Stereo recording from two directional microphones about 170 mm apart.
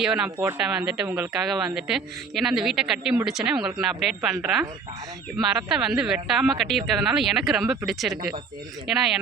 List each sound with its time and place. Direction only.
0.0 s a woman's voice: 5° right (ahead or behind)
0.3 s a woman's voice: 15° right (ahead or behind)